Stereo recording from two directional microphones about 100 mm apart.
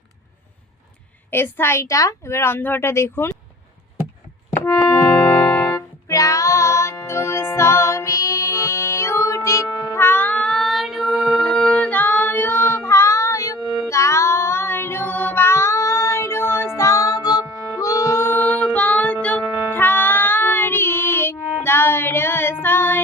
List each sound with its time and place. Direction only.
1.3 s a woman's voice: 25° left (ahead or behind)
4.5 s music: 15° left (ahead or behind)
6.1 s music: 35° left (ahead or behind)
13.9 s child singing: 30° left (ahead or behind)